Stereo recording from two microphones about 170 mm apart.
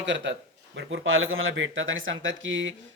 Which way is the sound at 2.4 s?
90° right.